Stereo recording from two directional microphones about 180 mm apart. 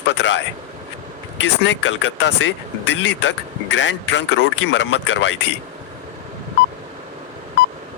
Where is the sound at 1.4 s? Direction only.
90° left.